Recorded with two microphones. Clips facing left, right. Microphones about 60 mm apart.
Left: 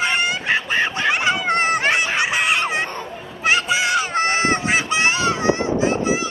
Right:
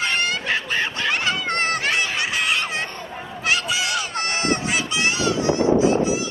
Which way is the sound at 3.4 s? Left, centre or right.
Left.